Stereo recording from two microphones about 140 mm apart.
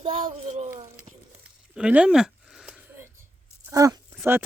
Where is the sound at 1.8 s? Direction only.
10° right (ahead or behind).